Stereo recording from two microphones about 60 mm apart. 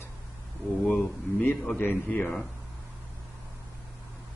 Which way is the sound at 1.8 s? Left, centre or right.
Left.